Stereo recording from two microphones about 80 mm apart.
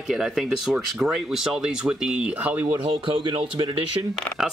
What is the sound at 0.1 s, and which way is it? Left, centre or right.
Speech, centre.